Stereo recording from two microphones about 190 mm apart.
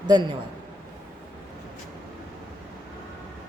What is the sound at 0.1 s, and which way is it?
Speech, 20° right (ahead or behind).